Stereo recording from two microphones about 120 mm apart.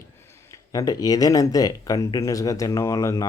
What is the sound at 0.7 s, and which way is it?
Speech, 30° left (ahead or behind).